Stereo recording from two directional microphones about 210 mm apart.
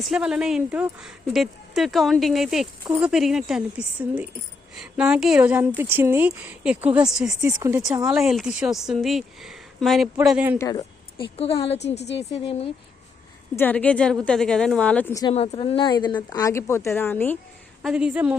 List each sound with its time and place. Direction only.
0.1 s speech: 5° right (ahead or behind)
10.6 s a woman's voice: 20° left (ahead or behind)
13.6 s speech: 5° left (ahead or behind)
15.3 s speech: 25° left (ahead or behind); by 17.3 s 10° left (ahead or behind)
17.8 s speech: 5° right (ahead or behind)